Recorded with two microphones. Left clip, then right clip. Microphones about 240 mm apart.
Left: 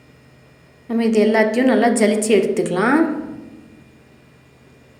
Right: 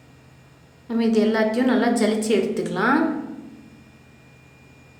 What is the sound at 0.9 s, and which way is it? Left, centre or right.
A woman's voice, centre.